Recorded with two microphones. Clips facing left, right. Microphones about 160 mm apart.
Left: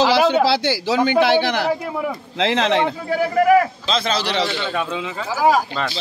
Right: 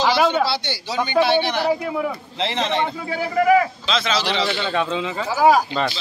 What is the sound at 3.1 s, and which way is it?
A man's voice, 50° left (ahead or behind).